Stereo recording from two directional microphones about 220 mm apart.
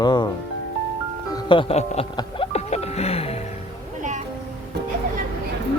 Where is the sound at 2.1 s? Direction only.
25° left (ahead or behind).